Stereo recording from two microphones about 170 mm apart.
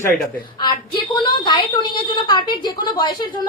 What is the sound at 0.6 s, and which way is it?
A woman's voice, 25° left (ahead or behind).